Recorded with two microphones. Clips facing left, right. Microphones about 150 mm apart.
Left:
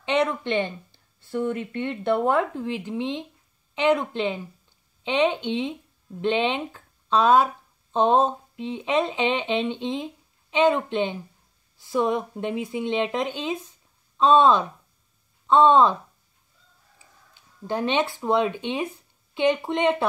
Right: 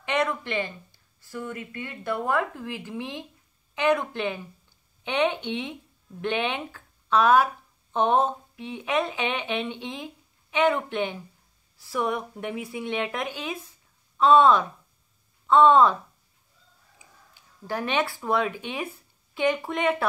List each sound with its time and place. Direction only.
0.0 s speech: 25° left (ahead or behind)
17.6 s speech: 20° left (ahead or behind)